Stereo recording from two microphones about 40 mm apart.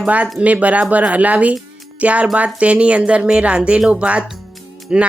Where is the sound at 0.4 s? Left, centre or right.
Right.